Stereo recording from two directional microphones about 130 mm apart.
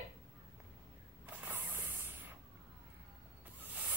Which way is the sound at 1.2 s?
15° right (ahead or behind).